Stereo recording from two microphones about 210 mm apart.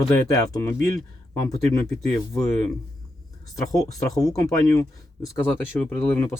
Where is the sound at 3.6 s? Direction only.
15° left (ahead or behind).